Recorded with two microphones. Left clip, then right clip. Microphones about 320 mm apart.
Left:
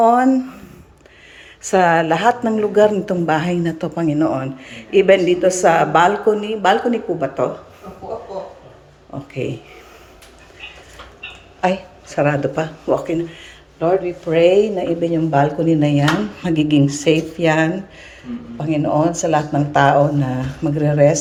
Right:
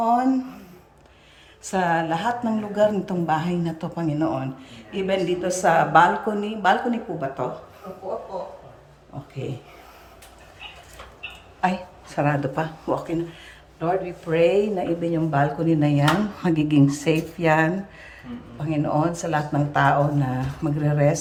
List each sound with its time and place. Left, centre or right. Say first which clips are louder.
0.0 s speech: left 7 dB; centre
1.6 s speech: left 8 dB; centre
11.6 s speech: left 5 dB; centre
14.3 s a woman's voice: left 6 dB; right
15.0 s speech: left 8 dB; centre
18.9 s speech: left 8 dB; centre